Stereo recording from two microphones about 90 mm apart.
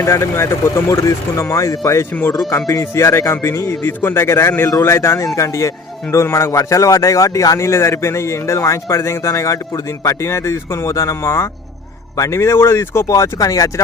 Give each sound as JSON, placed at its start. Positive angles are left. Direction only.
{"t": 0.0, "sound": "a man's voice", "side_deg": 30}